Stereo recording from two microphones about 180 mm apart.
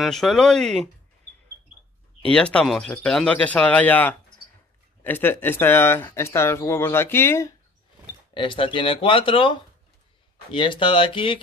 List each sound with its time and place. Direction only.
0.0 s speech: centre (ahead or behind)
2.3 s speech: 5° left (ahead or behind)
8.4 s speech: 30° left (ahead or behind)